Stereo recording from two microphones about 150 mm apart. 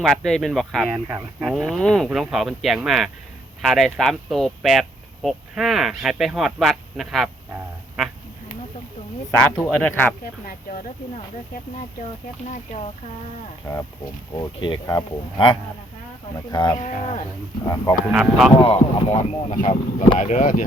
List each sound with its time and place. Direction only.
0.0 s speech: centre (ahead or behind)
0.9 s speech: 20° right (ahead or behind)
1.4 s speech: centre (ahead or behind)
9.4 s speech: 5° left (ahead or behind)
12.5 s speech: 50° left (ahead or behind)
13.7 s speech: 15° left (ahead or behind)
14.3 s speech: 30° left (ahead or behind)
16.7 s speech: 50° left (ahead or behind)
18.1 s speech: 5° right (ahead or behind)
18.5 s speech: 35° left (ahead or behind)
20.1 s speech: 50° left (ahead or behind)